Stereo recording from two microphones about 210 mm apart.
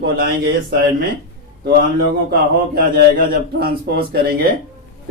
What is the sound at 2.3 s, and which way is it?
A man's voice, 45° right (ahead or behind).